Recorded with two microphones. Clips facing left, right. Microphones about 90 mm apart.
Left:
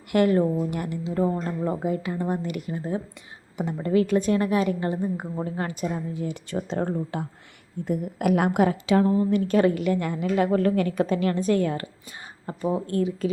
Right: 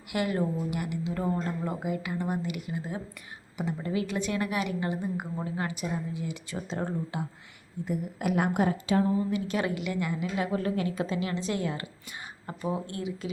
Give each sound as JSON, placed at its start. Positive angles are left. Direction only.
{"t": 0.1, "sound": "a woman's voice", "side_deg": 45}
{"t": 2.1, "sound": "speech", "side_deg": -10}
{"t": 2.4, "sound": "a woman's voice", "side_deg": 45}
{"t": 7.9, "sound": "a woman's voice", "side_deg": 55}
{"t": 9.3, "sound": "a woman's voice", "side_deg": 45}
{"t": 12.0, "sound": "a sound", "side_deg": 30}
{"t": 12.9, "sound": "a woman's voice", "side_deg": 40}